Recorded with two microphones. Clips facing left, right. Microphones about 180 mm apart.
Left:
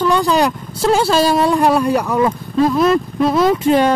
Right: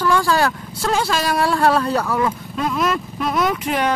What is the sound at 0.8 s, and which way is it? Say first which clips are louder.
Speech: left 7 dB; 30° left (ahead or behind).